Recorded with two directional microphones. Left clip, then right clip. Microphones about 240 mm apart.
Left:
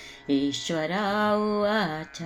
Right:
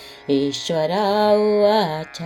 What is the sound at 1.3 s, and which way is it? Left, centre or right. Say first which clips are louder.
Speech: right 9 dB; right.